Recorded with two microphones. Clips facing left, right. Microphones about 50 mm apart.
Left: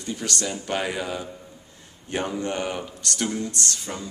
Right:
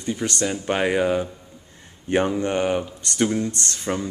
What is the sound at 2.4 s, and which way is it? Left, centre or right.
A man's voice, right.